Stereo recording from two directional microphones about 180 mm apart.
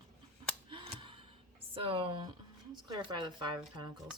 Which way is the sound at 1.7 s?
30° right (ahead or behind).